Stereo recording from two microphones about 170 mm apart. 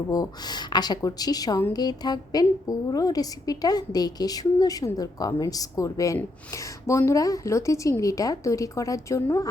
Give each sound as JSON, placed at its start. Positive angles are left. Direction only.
{"t": 0.1, "sound": "a woman's voice", "side_deg": 20}